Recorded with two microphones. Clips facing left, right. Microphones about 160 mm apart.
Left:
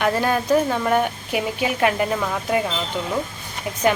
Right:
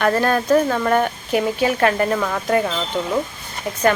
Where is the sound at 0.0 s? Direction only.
10° left (ahead or behind).